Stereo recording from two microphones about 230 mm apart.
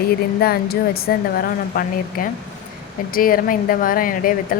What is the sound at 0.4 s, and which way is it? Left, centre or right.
Speech, left.